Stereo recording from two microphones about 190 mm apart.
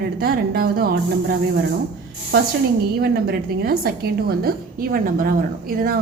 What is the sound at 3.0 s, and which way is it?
A woman's voice, 55° right (ahead or behind).